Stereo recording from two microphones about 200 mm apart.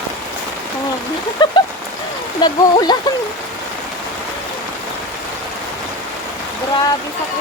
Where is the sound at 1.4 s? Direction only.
20° left (ahead or behind).